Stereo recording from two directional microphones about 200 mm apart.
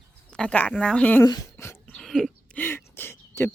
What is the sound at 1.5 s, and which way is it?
Dog, 10° left (ahead or behind).